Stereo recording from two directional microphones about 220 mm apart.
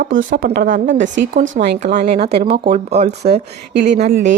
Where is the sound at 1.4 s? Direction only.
55° right (ahead or behind).